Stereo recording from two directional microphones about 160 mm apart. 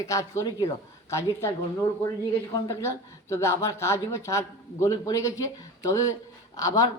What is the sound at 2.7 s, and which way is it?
Speech, 15° left (ahead or behind).